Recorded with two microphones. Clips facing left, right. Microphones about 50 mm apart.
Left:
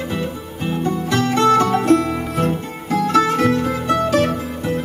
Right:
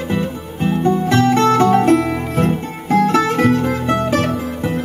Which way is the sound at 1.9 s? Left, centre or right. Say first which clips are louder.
Right 1 dB; centre.